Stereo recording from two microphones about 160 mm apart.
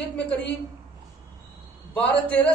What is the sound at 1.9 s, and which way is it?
Speech, 10° left (ahead or behind).